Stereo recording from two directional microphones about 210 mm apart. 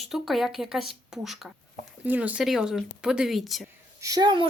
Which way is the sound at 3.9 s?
15° right (ahead or behind).